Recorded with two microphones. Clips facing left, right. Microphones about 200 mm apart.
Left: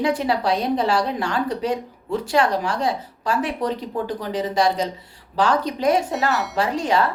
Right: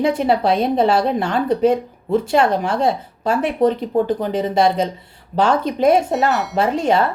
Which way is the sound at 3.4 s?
55° right (ahead or behind).